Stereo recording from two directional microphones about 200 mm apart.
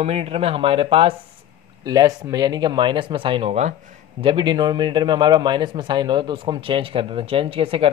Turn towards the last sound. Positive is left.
turn(degrees=-30)  # may be behind; listen again after turning